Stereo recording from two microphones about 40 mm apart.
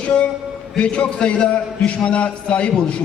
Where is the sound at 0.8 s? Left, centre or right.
Left.